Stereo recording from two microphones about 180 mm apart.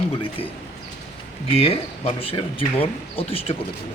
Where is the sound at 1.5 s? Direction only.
35° left (ahead or behind).